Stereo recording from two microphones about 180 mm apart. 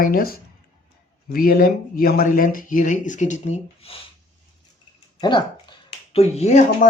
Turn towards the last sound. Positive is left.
turn(degrees=35)  # may be behind; listen again after turning